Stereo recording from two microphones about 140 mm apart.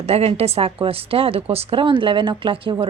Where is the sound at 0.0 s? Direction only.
50° right (ahead or behind).